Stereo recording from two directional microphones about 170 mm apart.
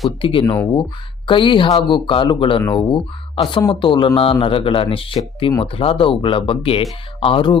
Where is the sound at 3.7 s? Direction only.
30° left (ahead or behind).